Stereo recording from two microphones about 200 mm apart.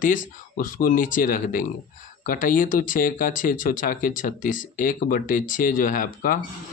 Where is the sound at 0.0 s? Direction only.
40° left (ahead or behind).